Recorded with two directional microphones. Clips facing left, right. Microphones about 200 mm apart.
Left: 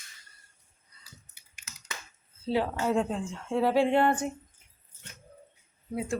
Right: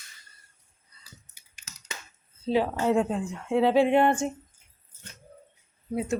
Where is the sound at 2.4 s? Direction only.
15° right (ahead or behind).